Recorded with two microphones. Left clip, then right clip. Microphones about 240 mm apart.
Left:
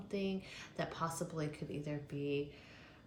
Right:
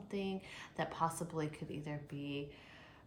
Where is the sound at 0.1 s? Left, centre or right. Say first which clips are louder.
Left 1 dB; right.